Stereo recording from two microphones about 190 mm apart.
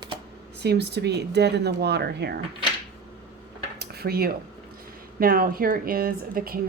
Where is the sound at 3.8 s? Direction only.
55° right (ahead or behind).